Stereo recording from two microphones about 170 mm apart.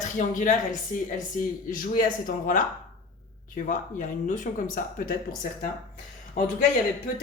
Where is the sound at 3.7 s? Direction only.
50° left (ahead or behind).